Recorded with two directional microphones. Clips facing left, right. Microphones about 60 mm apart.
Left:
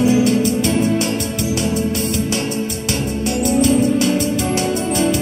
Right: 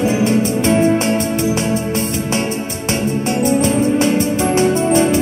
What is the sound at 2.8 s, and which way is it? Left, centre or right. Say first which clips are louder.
Music: right 6 dB; right.